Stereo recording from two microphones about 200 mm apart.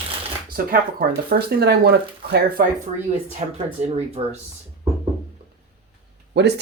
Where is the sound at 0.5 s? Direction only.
45° right (ahead or behind).